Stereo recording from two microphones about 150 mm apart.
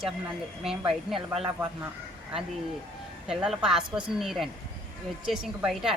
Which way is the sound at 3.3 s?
5° right (ahead or behind).